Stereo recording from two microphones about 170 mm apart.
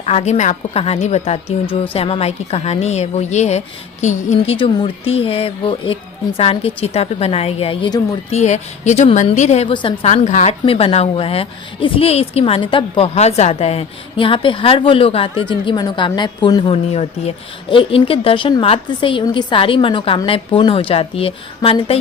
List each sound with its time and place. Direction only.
0.0 s a woman's voice: 40° left (ahead or behind)
8.3 s a woman's voice: 40° left (ahead or behind)
10.1 s a woman's voice: 45° left (ahead or behind)